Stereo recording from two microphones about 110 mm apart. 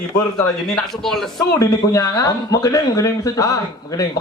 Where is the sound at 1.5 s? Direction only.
30° left (ahead or behind).